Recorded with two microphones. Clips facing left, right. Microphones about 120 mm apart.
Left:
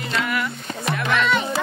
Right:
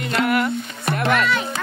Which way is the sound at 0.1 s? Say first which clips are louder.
Right 5 dB; 50° right (ahead or behind).